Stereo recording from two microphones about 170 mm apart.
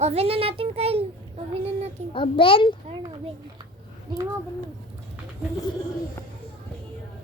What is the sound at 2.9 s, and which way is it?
Speech, 30° right (ahead or behind).